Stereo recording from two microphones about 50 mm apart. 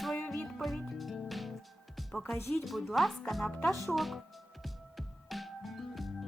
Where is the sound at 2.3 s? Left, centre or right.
Left.